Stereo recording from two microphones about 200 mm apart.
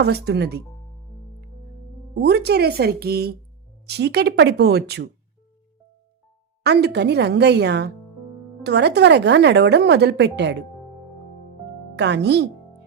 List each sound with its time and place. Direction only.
0.0 s speech: 55° right (ahead or behind)
2.2 s a woman's voice: 55° right (ahead or behind)
6.6 s a woman's voice: 55° right (ahead or behind)
11.9 s a woman's voice: 60° right (ahead or behind)